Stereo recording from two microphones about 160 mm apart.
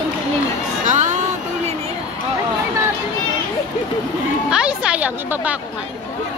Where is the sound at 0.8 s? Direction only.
50° right (ahead or behind).